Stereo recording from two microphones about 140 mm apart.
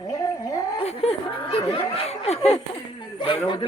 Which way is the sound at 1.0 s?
45° left (ahead or behind).